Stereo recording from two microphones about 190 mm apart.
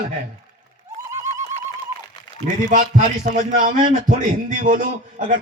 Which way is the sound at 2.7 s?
45° right (ahead or behind).